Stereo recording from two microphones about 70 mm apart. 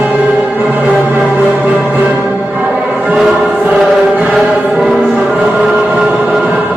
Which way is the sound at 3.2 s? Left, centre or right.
Centre.